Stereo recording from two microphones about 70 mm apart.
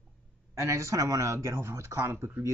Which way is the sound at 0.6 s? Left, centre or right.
Right.